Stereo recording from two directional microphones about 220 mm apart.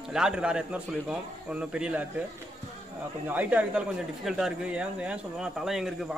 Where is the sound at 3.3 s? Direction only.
5° right (ahead or behind).